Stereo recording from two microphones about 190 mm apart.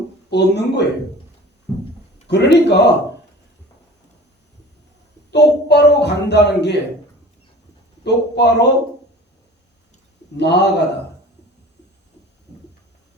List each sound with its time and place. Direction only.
0.3 s speech: 65° left (ahead or behind)
1.7 s speech: centre (ahead or behind)
2.2 s speech: 65° left (ahead or behind)
5.3 s speech: 65° left (ahead or behind)
8.0 s speech: 65° left (ahead or behind)
10.3 s speech: 65° left (ahead or behind)